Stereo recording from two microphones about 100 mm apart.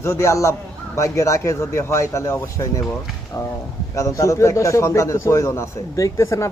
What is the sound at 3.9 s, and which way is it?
Speech, 30° left (ahead or behind).